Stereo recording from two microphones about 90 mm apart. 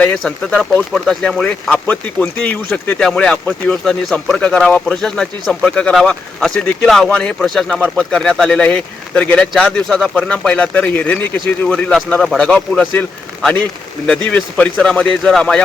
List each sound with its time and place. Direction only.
0.1 s speech: 5° left (ahead or behind)
3.0 s speech: 10° left (ahead or behind)
14.1 s speech: 10° left (ahead or behind)